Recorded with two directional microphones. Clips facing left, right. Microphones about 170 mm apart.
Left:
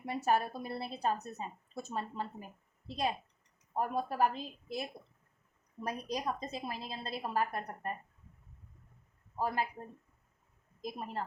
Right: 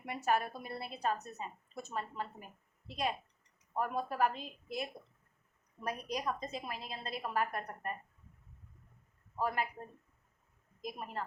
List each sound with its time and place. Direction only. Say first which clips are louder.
0.0 s a woman's voice: left 2 dB; 30° left (ahead or behind)
10.8 s a woman's voice: left 2 dB; 30° left (ahead or behind)